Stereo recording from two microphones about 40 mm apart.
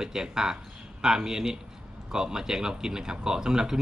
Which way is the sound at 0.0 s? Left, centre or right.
Centre.